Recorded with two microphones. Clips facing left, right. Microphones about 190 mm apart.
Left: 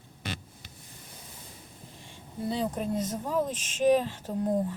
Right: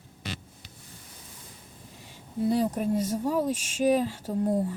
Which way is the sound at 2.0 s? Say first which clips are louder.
Right 6 dB; 5° right (ahead or behind).